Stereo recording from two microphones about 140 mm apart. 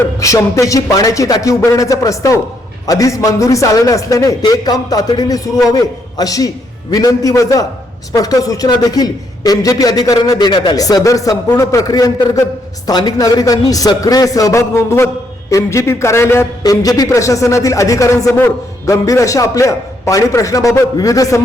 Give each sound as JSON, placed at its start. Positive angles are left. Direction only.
{"t": 0.0, "sound": "a man's voice", "side_deg": 25}